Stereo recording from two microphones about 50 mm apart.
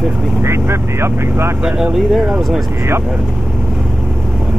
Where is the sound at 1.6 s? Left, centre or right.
Centre.